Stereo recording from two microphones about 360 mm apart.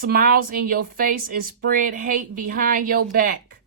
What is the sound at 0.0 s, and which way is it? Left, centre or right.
Speech, right.